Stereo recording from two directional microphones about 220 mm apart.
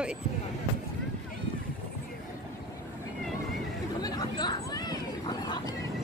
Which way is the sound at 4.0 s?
20° left (ahead or behind).